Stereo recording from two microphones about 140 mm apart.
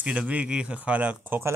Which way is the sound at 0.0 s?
10° right (ahead or behind).